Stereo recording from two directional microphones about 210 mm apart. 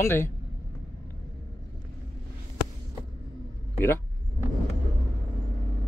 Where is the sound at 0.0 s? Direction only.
10° left (ahead or behind).